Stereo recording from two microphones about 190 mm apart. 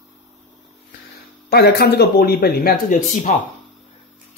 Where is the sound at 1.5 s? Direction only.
55° left (ahead or behind).